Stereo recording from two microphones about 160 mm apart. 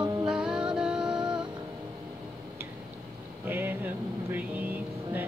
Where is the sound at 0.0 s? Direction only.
25° right (ahead or behind).